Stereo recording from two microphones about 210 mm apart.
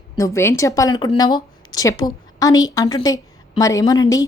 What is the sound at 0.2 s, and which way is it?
A woman's voice, 15° left (ahead or behind).